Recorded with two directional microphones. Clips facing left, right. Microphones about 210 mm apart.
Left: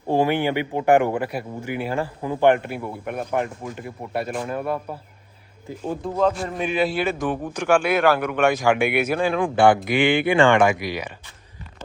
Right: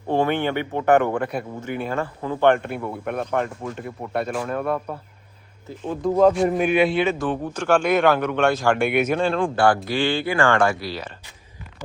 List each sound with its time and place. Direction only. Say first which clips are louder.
0.1 s speech: left 1 dB; 10° left (ahead or behind)
6.5 s a man's voice: right 4 dB; centre (ahead or behind)
9.6 s speech: left 5 dB; 20° left (ahead or behind)